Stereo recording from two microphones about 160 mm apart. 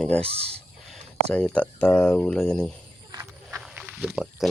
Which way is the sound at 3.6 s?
5° right (ahead or behind).